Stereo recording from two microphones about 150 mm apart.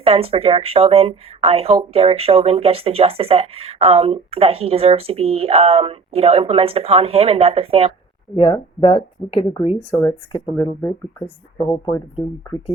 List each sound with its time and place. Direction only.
0.0 s speech: 40° right (ahead or behind)
8.4 s speech: 30° left (ahead or behind)
9.9 s speech: 20° left (ahead or behind)